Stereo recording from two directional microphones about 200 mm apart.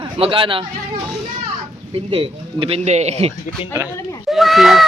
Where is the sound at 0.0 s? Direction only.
25° right (ahead or behind).